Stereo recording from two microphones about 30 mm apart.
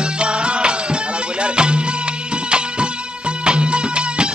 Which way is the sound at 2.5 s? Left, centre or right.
Right.